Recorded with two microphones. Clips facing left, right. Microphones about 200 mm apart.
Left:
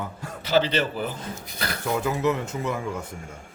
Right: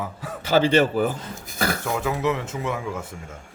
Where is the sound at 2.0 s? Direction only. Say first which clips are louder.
Left 2 dB; centre (ahead or behind).